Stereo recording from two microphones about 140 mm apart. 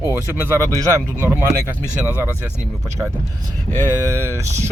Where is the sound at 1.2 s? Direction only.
15° right (ahead or behind).